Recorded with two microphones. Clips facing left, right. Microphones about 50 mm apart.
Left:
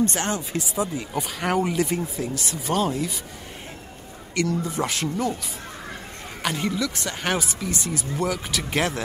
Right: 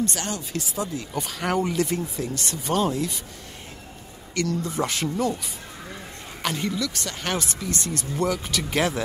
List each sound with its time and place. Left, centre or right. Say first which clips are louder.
0.0 s speech: left 4 dB; left
1.1 s speech: left 1 dB; centre
4.6 s speech: even; centre
6.4 s speech: left 1 dB; centre
6.8 s speech: left 2 dB; centre